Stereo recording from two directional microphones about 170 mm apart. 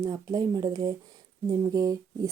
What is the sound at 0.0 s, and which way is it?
Speech, 20° right (ahead or behind).